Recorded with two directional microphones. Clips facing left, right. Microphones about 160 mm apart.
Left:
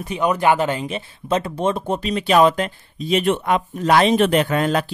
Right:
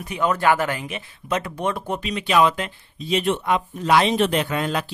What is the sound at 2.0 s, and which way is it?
Speech, 40° left (ahead or behind).